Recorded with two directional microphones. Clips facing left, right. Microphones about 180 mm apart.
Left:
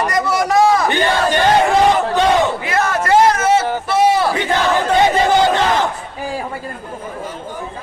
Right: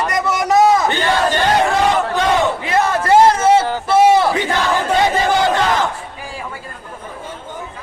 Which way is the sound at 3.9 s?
25° right (ahead or behind).